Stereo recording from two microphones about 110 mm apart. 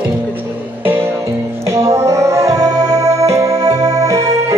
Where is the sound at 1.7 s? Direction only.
25° right (ahead or behind).